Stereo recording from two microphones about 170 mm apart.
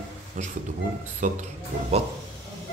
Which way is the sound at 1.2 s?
45° right (ahead or behind).